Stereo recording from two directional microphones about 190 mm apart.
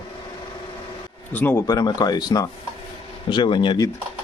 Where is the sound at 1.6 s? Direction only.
20° left (ahead or behind).